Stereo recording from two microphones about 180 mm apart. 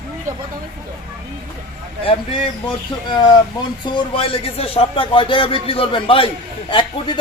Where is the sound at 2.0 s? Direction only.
30° left (ahead or behind).